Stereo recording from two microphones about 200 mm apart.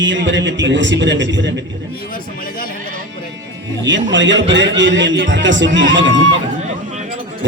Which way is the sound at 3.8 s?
65° right (ahead or behind).